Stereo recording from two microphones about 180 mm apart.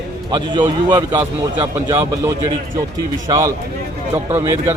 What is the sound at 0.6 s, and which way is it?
Speech, 15° right (ahead or behind).